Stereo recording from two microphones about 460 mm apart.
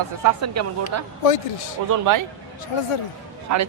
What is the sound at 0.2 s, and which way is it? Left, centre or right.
A man's voice, right.